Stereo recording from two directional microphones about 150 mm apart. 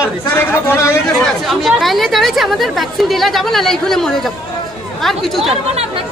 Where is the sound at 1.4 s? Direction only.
Centre (ahead or behind).